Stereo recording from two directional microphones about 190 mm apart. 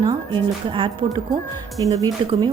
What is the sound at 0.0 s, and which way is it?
Speech, 25° right (ahead or behind).